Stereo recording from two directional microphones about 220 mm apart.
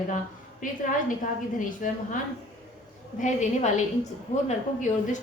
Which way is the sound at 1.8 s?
35° left (ahead or behind).